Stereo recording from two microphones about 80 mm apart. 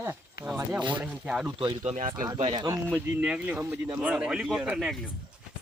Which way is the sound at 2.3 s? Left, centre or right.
Right.